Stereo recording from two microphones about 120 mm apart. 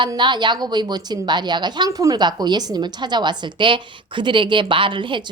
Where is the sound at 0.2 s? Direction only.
40° right (ahead or behind).